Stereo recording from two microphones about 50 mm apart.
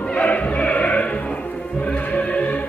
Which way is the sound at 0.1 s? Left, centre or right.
Left.